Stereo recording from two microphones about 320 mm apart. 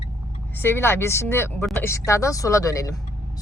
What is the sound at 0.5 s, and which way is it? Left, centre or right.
Speech, centre.